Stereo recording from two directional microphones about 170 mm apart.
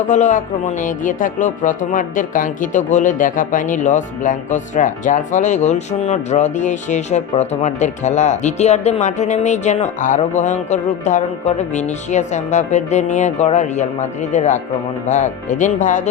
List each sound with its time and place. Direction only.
0.1 s speech: 45° left (ahead or behind)